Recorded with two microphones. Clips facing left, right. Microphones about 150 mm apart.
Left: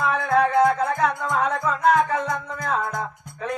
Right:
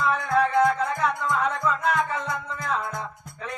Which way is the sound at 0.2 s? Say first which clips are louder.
Left 4 dB; 55° left (ahead or behind).